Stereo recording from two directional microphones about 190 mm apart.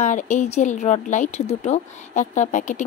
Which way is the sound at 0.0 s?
40° left (ahead or behind).